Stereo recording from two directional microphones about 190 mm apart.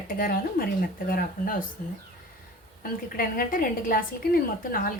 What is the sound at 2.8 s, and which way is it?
A woman's voice, 45° left (ahead or behind).